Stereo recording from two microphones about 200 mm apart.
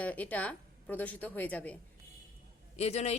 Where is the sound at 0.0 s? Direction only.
10° left (ahead or behind).